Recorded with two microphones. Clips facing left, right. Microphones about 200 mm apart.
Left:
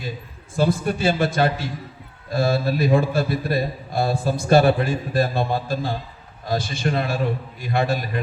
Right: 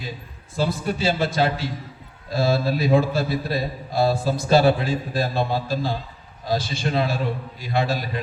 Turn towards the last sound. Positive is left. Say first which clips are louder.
# left 1 dB
turn(degrees=55)  # may be behind; listen again after turning